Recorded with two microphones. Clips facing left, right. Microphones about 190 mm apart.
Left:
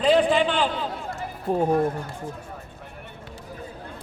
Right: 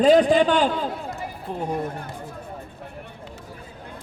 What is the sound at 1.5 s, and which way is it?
Speech, 45° left (ahead or behind).